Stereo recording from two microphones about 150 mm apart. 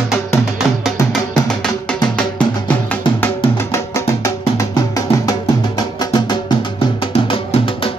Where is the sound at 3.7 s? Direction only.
20° left (ahead or behind).